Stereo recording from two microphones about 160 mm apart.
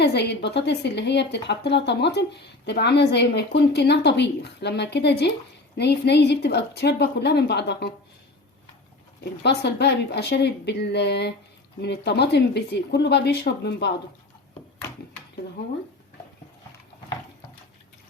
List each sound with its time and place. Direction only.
0.0 s speech: 90° left
9.4 s speech: 90° left